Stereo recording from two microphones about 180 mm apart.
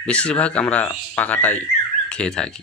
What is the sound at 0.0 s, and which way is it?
Speech, 5° left (ahead or behind).